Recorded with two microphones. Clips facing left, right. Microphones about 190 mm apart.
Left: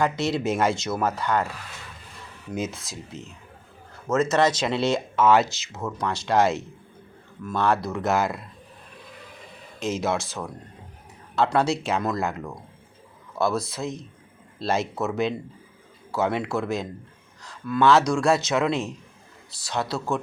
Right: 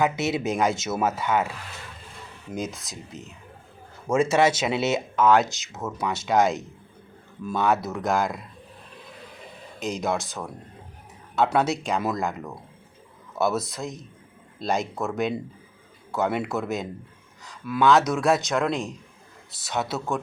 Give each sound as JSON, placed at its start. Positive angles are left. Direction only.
{"t": 0.0, "sound": "speech", "side_deg": -5}
{"t": 4.1, "sound": "speech", "side_deg": -10}
{"t": 9.8, "sound": "speech", "side_deg": 0}